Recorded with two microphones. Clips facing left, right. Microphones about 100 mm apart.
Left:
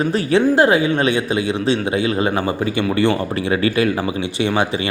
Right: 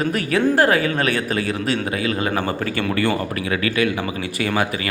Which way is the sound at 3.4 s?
30° left (ahead or behind).